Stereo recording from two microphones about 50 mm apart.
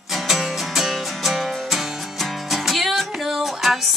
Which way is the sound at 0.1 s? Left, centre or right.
Centre.